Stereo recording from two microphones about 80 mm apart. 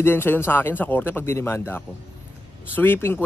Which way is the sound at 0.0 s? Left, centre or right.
Left.